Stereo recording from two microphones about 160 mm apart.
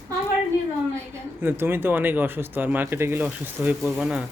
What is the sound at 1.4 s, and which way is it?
Speech, 15° right (ahead or behind).